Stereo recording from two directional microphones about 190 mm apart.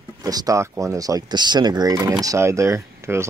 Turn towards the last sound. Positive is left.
turn(degrees=-15)  # may be behind; listen again after turning